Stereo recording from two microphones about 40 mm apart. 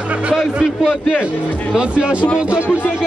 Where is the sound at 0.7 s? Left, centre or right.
Centre.